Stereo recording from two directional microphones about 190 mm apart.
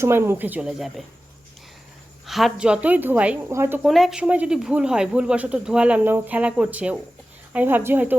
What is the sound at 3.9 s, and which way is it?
Speech, centre (ahead or behind).